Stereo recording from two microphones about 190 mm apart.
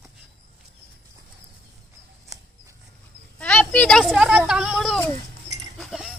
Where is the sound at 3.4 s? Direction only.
5° left (ahead or behind).